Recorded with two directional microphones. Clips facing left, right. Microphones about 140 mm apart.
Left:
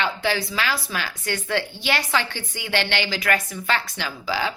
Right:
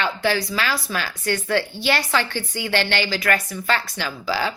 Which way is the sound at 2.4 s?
45° right (ahead or behind).